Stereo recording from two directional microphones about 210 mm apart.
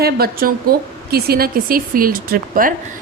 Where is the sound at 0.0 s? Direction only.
45° right (ahead or behind).